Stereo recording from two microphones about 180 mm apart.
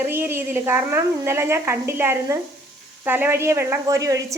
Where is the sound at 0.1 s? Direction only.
10° right (ahead or behind).